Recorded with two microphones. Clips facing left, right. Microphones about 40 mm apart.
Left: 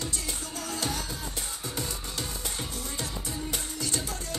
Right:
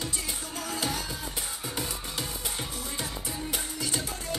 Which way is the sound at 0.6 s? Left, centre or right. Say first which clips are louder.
Right 1 dB; centre.